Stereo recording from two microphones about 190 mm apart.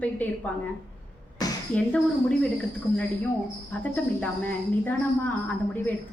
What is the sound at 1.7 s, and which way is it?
Speech, 5° left (ahead or behind).